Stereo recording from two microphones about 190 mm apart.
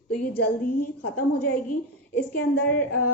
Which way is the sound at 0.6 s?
45° left (ahead or behind).